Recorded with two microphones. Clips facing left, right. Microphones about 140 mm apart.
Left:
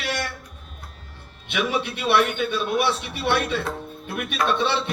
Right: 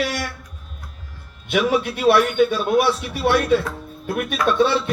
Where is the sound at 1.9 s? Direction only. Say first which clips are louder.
Right 5 dB; 45° right (ahead or behind).